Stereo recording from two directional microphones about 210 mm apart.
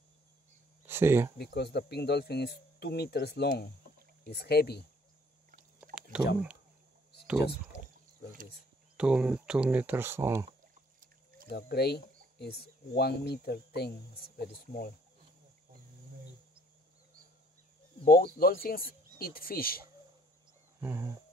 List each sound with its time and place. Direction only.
0.8 s speech: 10° right (ahead or behind)
1.4 s speech: 50° left (ahead or behind)
6.1 s speech: 5° right (ahead or behind)
8.9 s speech: 5° right (ahead or behind)
11.4 s speech: 50° left (ahead or behind)
18.0 s speech: 45° left (ahead or behind)
20.8 s speech: 10° right (ahead or behind)